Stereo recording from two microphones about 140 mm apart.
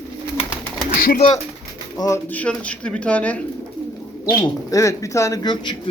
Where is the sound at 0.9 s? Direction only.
90° left.